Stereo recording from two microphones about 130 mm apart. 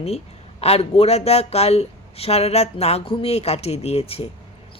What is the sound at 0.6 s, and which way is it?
Speech, 50° left (ahead or behind).